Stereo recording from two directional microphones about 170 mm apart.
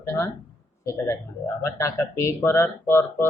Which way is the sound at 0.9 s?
15° left (ahead or behind).